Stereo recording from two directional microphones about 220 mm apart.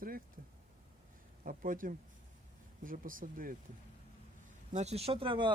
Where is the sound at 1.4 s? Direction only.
40° right (ahead or behind).